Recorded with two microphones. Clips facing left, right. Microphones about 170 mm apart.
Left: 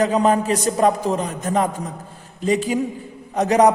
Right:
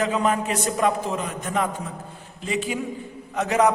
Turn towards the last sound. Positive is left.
turn(degrees=35)  # may be behind; listen again after turning